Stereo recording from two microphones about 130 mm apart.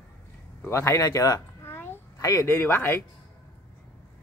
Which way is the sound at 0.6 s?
20° left (ahead or behind).